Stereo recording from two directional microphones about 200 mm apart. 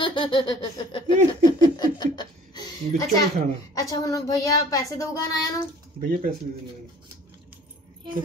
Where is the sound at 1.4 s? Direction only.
20° left (ahead or behind).